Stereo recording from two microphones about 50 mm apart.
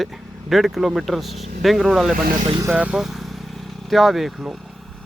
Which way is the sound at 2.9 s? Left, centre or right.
Centre.